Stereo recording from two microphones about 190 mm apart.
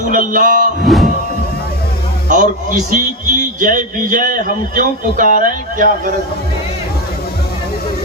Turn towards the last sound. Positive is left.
turn(degrees=-45)  # may be behind; listen again after turning